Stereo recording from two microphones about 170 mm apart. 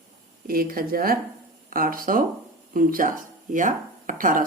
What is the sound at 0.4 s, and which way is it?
A woman's voice, 60° right (ahead or behind).